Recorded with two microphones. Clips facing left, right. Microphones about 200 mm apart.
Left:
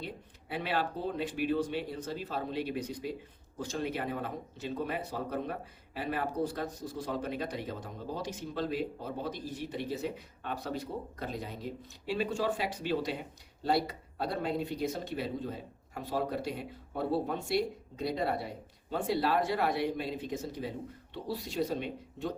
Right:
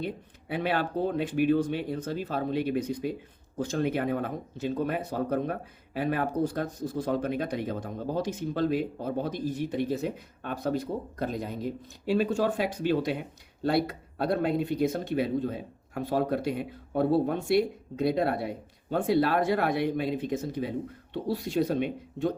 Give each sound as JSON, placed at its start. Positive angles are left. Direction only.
{"t": 0.0, "sound": "speech", "side_deg": -55}